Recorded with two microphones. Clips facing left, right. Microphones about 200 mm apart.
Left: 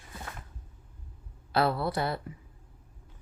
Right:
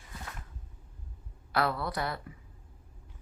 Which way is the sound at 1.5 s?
25° left (ahead or behind).